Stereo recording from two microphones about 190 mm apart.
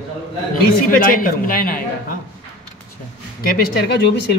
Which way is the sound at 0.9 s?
50° left (ahead or behind).